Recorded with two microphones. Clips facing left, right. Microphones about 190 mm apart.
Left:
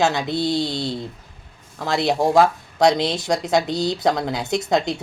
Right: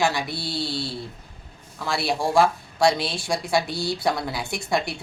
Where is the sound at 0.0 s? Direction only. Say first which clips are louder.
Left 5 dB; 20° left (ahead or behind).